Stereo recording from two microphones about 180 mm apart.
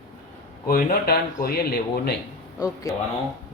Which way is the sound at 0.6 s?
55° left (ahead or behind).